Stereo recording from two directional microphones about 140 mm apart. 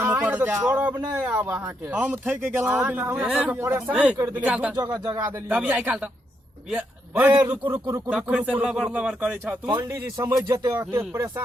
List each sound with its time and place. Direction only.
0.0 s speech: 10° right (ahead or behind)
4.7 s speech: 30° right (ahead or behind)
5.0 s a man's voice: 20° right (ahead or behind)
7.9 s speech: 25° right (ahead or behind)
8.1 s speech: 10° right (ahead or behind)
9.6 s speech: 25° right (ahead or behind)